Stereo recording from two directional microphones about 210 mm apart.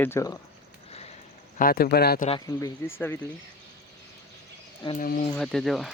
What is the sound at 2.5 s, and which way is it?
Speech, 15° left (ahead or behind).